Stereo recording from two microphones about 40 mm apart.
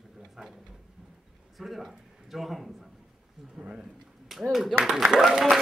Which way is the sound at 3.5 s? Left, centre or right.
Right.